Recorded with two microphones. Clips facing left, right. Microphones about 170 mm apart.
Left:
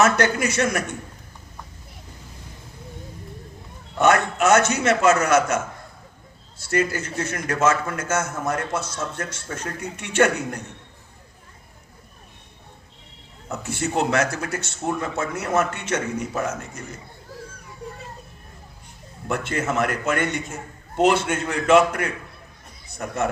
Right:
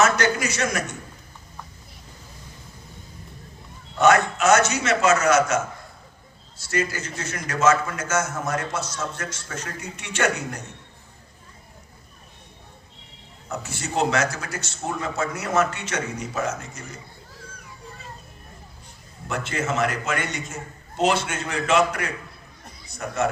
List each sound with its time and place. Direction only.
0.0 s a man's voice: 55° left (ahead or behind)
4.0 s a man's voice: 55° left (ahead or behind)
6.6 s a man's voice: 55° left (ahead or behind)
13.6 s a man's voice: 55° left (ahead or behind)
19.3 s a man's voice: 55° left (ahead or behind)